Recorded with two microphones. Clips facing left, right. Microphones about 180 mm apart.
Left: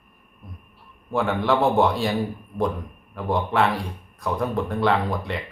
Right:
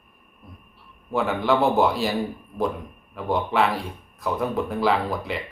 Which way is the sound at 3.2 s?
Centre (ahead or behind).